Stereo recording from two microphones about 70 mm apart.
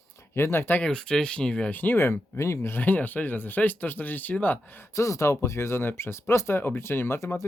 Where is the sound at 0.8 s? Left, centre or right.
Centre.